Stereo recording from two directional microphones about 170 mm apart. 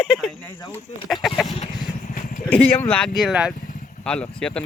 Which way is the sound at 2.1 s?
50° left (ahead or behind).